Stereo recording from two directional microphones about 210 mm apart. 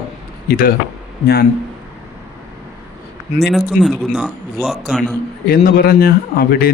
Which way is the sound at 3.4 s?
Centre (ahead or behind).